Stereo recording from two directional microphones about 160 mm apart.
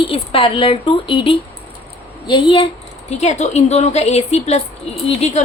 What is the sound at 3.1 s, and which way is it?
A woman's voice, 45° left (ahead or behind).